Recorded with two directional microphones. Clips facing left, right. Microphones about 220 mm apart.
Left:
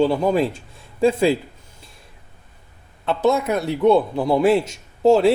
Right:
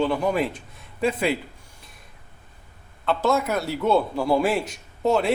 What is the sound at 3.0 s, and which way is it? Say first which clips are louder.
A man's voice: left 3 dB; 20° left (ahead or behind).